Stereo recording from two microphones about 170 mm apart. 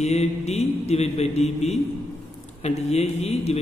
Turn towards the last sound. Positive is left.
turn(degrees=40)  # may be behind; listen again after turning